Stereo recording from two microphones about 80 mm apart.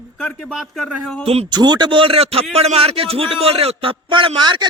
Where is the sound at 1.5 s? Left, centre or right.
Right.